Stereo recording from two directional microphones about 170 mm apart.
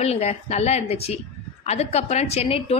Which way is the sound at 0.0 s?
40° left (ahead or behind).